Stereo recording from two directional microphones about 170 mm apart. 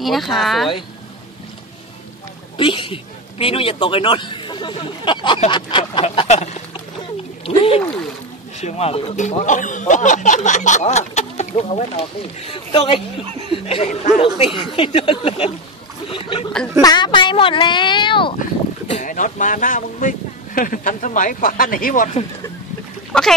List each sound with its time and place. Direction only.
0.0 s speech: centre (ahead or behind)
2.5 s speech: 30° left (ahead or behind)
6.2 s a sound: 40° left (ahead or behind)
7.4 s speech: 35° left (ahead or behind)
18.9 s speech: 45° left (ahead or behind)